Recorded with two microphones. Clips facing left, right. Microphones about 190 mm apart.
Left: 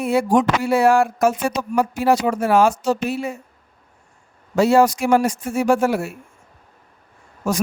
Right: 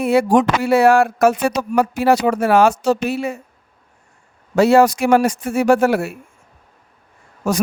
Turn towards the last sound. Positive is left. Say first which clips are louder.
# right 3 dB
turn(degrees=-65)  # may be behind; listen again after turning